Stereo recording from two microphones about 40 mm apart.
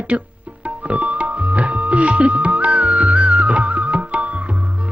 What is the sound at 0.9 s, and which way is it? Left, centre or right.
Tabla, right.